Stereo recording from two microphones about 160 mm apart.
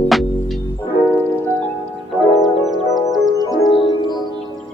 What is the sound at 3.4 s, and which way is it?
Music, 25° left (ahead or behind).